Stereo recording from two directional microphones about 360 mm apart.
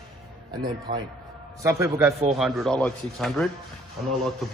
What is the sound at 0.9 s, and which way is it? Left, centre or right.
Speech, right.